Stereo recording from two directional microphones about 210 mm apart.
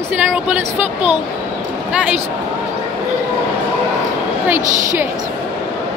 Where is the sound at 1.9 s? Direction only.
5° right (ahead or behind).